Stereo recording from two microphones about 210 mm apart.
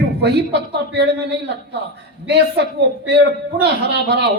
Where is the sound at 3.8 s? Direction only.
55° right (ahead or behind).